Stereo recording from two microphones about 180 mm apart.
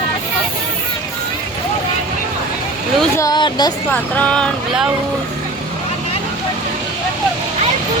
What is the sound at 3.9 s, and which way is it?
Speech, 5° left (ahead or behind).